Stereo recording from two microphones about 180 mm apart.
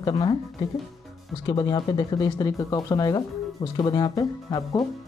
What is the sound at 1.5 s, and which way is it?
Speech, 20° left (ahead or behind).